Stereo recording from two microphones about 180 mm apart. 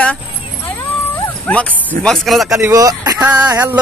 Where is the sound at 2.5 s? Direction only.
15° right (ahead or behind).